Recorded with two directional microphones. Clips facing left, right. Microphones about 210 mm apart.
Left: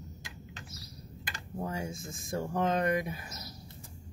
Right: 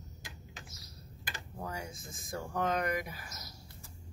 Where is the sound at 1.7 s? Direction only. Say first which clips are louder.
Left 4 dB; 25° left (ahead or behind).